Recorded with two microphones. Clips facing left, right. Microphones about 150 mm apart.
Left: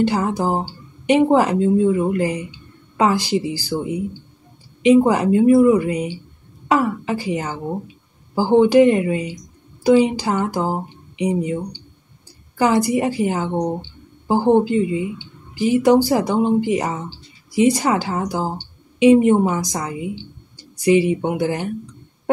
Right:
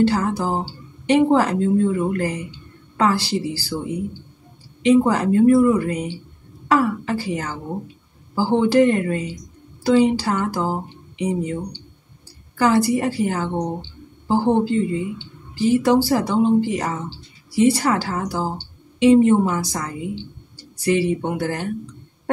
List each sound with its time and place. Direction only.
0.0 s a woman's voice: 15° left (ahead or behind)
4.8 s a woman's voice: 15° left (ahead or behind)
12.5 s a woman's voice: 15° left (ahead or behind)